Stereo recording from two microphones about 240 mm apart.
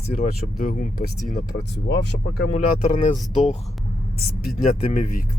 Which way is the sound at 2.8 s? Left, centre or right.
Left.